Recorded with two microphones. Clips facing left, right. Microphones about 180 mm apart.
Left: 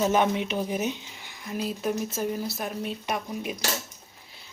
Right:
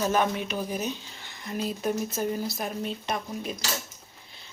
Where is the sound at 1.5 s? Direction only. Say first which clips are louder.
Even; 5° left (ahead or behind).